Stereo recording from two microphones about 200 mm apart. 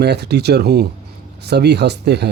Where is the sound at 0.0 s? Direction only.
55° right (ahead or behind).